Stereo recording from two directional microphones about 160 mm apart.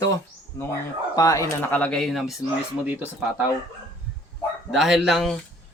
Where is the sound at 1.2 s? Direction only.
20° left (ahead or behind).